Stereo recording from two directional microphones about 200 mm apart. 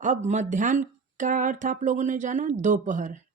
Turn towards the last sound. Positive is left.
turn(degrees=-40)  # may be behind; listen again after turning